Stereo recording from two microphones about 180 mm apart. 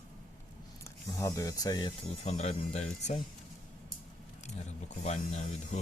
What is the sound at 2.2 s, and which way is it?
Speech, 40° left (ahead or behind).